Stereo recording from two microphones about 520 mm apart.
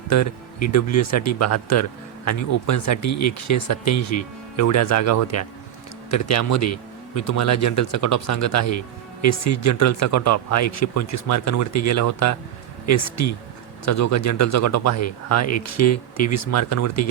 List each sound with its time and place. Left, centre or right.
0.1 s speech: left